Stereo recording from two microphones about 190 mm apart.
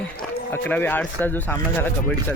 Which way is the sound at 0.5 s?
10° left (ahead or behind).